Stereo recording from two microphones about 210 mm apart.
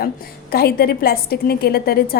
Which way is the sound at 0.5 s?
45° left (ahead or behind).